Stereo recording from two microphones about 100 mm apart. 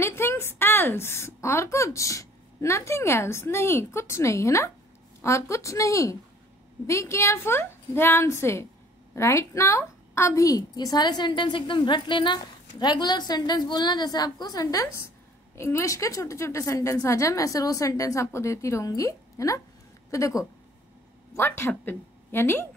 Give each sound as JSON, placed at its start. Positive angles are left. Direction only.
{"t": 0.0, "sound": "a child's voice", "side_deg": 25}
{"t": 15.5, "sound": "a woman's voice", "side_deg": 30}
{"t": 21.4, "sound": "speech", "side_deg": 20}